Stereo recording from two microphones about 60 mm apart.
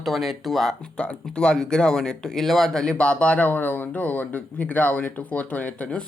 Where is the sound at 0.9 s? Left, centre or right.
Centre.